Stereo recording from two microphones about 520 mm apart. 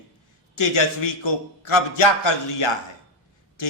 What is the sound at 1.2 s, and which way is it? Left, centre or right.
A man's voice, left.